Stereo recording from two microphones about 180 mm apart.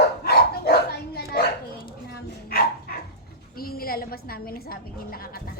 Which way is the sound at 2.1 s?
60° left (ahead or behind).